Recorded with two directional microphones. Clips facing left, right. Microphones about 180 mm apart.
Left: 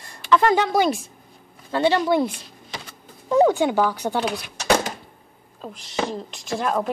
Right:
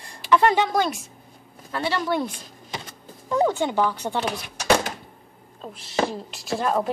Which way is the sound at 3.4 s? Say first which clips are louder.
Left 3 dB; 5° left (ahead or behind).